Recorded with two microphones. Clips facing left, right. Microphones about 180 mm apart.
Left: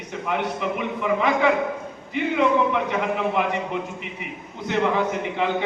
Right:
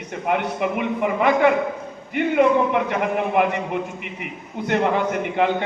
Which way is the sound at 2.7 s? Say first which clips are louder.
Right 2 dB; 55° right (ahead or behind).